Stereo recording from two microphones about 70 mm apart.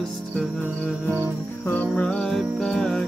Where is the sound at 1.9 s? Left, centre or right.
Centre.